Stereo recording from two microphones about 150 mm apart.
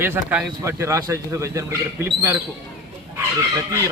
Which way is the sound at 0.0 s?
15° right (ahead or behind).